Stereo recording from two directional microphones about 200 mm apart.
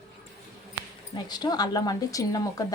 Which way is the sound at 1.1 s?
20° left (ahead or behind).